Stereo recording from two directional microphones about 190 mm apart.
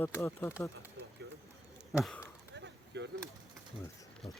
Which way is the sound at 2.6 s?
65° right (ahead or behind).